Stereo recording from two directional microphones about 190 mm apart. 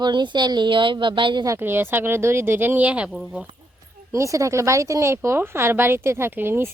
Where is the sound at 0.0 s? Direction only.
25° right (ahead or behind).